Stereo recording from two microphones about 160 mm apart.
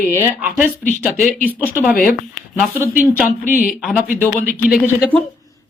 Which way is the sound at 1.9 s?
60° left (ahead or behind).